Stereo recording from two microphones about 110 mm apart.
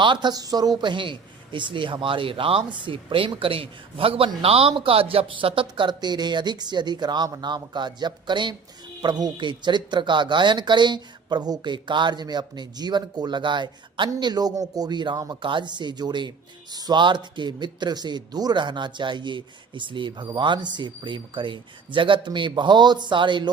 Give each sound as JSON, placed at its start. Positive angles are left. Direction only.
{"t": 0.0, "sound": "a man's voice", "side_deg": -45}